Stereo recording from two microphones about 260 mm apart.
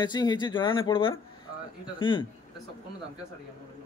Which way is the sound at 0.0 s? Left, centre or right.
Centre.